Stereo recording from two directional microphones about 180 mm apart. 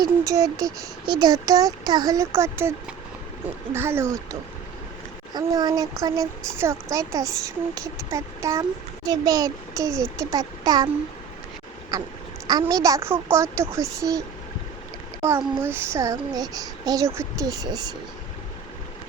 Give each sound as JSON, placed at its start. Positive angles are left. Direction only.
{"t": 0.0, "sound": "speech", "side_deg": -20}
{"t": 11.9, "sound": "speech", "side_deg": -20}
{"t": 15.2, "sound": "speech", "side_deg": -15}